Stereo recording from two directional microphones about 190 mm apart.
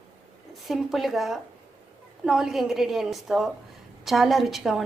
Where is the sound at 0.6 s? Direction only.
Centre (ahead or behind).